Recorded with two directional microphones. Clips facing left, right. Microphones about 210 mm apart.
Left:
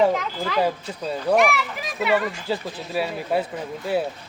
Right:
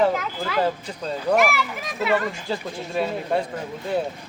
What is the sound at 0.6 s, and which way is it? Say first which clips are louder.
Speech: even; 10° left (ahead or behind).